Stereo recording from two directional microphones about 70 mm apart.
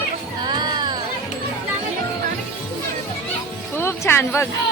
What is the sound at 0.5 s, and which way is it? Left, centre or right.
Music, right.